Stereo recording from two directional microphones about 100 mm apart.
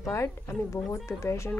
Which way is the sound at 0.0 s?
30° left (ahead or behind).